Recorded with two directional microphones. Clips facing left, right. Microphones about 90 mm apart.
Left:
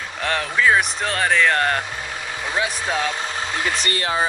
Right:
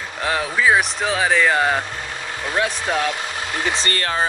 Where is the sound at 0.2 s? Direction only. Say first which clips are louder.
Right 1 dB; 5° right (ahead or behind).